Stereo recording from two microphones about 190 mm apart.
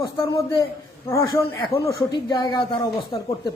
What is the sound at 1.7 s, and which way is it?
Speech, 20° left (ahead or behind).